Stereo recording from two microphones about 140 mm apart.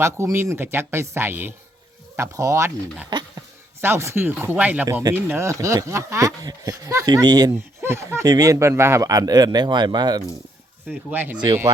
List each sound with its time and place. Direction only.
0.0 s speech: 20° right (ahead or behind)
10.8 s speech: 10° right (ahead or behind)